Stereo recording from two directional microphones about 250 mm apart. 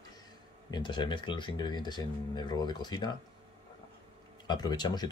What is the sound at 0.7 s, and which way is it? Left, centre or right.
Speech, centre.